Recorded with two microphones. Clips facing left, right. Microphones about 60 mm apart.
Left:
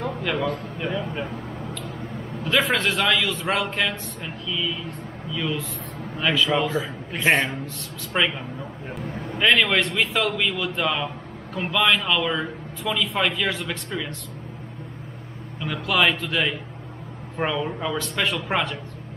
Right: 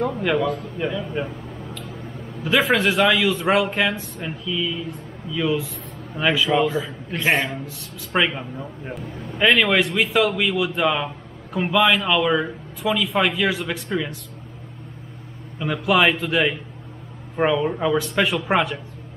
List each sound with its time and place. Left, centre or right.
0.1 s a man's voice: centre
0.9 s a sound: centre
2.4 s a man's voice: centre
15.6 s a man's voice: centre